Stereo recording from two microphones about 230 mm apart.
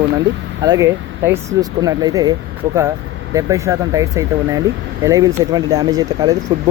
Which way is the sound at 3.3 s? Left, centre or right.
Centre.